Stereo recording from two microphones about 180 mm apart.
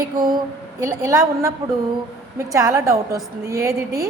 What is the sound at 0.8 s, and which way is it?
A woman's voice, 20° right (ahead or behind).